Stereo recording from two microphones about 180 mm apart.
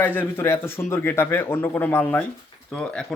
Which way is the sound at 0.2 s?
15° left (ahead or behind).